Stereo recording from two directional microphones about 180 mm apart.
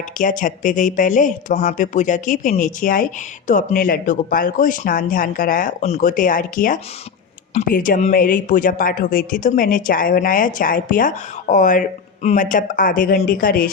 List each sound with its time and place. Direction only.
0.2 s speech: 45° left (ahead or behind)